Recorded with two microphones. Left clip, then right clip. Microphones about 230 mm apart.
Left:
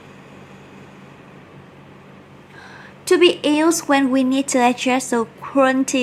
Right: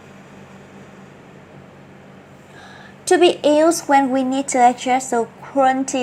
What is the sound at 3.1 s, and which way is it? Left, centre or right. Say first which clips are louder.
Speech: right 1 dB; centre.